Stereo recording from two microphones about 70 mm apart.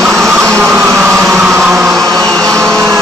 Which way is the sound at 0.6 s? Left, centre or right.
Centre.